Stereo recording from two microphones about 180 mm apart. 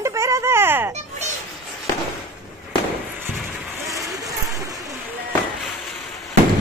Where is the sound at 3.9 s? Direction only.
20° right (ahead or behind).